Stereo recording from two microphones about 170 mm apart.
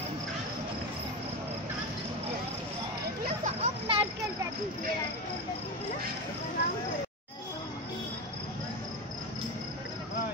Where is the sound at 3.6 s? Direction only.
35° right (ahead or behind).